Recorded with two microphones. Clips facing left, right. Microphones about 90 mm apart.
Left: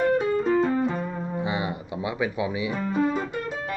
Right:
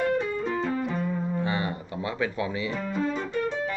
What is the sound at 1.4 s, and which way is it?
Speech, 15° left (ahead or behind).